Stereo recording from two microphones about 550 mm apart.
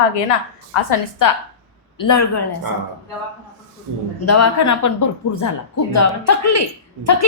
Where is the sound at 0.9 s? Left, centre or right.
Left.